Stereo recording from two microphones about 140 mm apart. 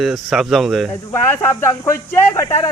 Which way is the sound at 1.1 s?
20° left (ahead or behind).